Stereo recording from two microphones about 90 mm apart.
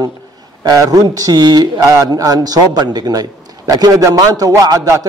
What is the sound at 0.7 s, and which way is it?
A man's voice, 45° right (ahead or behind).